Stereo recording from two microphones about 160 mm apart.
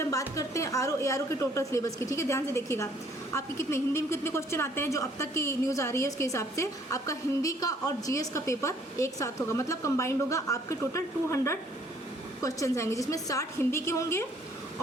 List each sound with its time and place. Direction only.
0.0 s a woman's voice: 20° left (ahead or behind)